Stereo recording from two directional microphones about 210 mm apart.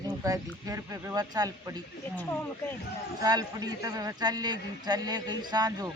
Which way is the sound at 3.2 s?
20° right (ahead or behind).